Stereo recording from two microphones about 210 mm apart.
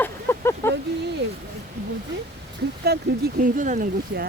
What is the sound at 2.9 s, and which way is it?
Speech, 50° right (ahead or behind).